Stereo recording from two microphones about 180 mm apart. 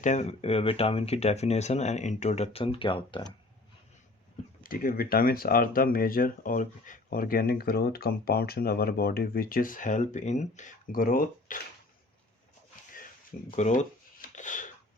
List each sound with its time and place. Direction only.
0.0 s speech: 40° left (ahead or behind)
4.6 s speech: 50° left (ahead or behind)
13.5 s speech: 40° left (ahead or behind)